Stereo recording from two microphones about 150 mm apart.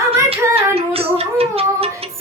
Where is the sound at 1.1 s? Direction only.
40° right (ahead or behind).